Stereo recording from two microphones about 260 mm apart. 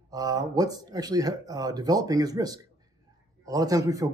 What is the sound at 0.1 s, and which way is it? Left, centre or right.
A man's voice, centre.